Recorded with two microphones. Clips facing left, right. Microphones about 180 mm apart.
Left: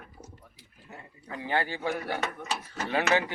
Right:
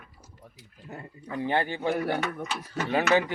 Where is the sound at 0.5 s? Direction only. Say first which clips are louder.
Right 10 dB; 55° right (ahead or behind).